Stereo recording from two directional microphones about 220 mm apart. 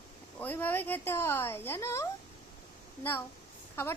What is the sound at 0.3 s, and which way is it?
A woman's voice, 10° left (ahead or behind).